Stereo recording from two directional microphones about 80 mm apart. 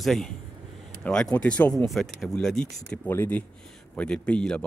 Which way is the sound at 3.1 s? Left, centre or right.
Left.